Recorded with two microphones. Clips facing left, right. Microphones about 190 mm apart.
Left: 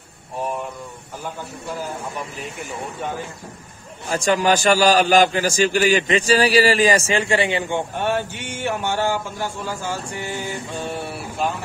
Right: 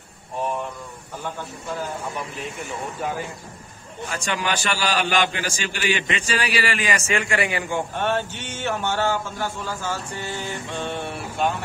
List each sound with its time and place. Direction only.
4.1 s a man's voice: 40° left (ahead or behind)
8.0 s speech: 10° left (ahead or behind)